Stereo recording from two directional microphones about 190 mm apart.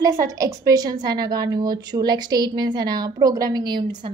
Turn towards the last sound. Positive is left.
turn(degrees=-25)  # may be behind; listen again after turning